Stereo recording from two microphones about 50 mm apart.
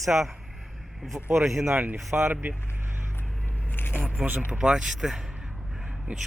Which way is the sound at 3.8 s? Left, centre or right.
Left.